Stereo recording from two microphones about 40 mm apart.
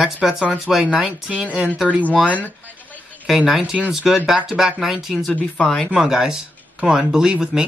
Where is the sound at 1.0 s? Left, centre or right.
Right.